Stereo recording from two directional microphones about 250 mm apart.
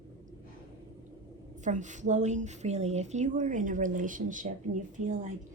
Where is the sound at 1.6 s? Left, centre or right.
Right.